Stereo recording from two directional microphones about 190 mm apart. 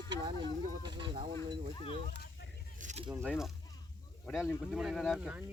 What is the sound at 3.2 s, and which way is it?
Speech, centre (ahead or behind).